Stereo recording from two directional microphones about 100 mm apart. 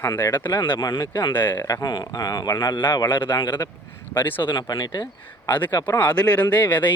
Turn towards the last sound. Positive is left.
turn(degrees=15)  # may be behind; listen again after turning